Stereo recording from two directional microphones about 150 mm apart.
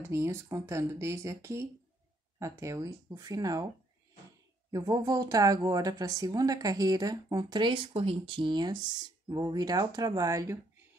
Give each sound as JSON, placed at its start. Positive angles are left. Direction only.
{"t": 0.0, "sound": "speech", "side_deg": -20}
{"t": 4.6, "sound": "speech", "side_deg": -25}